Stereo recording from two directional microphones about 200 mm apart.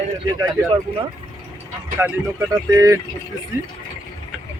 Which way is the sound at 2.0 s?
10° right (ahead or behind).